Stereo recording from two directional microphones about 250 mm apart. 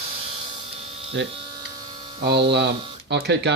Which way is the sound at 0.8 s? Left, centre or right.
Right.